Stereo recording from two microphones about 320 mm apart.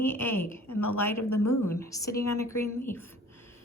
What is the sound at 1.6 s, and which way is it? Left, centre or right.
Speech, centre.